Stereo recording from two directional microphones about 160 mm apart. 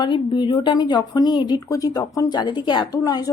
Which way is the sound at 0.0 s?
30° left (ahead or behind).